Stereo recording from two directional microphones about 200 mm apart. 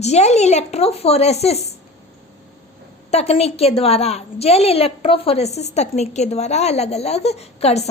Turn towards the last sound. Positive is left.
turn(degrees=30)  # may be behind; listen again after turning